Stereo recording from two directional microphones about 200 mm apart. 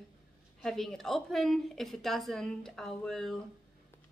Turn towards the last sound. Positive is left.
turn(degrees=0)  # may be behind; listen again after turning